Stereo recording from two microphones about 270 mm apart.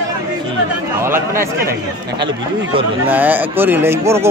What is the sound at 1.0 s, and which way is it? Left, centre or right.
Chatter, centre.